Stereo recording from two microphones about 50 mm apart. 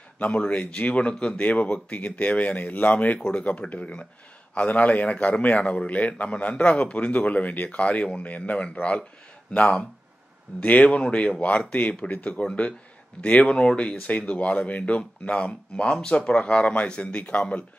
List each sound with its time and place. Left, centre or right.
0.2 s speech: left
3.2 s speech: centre
3.4 s speech: left
7.8 s speech: left
13.5 s speech: centre